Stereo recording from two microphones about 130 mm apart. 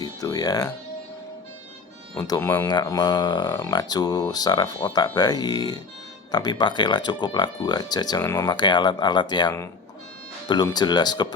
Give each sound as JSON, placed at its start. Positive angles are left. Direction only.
{"t": 0.0, "sound": "music", "side_deg": 30}
{"t": 2.1, "sound": "speech", "side_deg": 25}
{"t": 10.5, "sound": "speech", "side_deg": 35}